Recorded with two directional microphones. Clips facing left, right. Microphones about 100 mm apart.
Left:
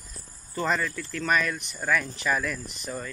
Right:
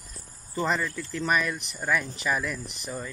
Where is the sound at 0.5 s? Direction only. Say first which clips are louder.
Even; 15° right (ahead or behind).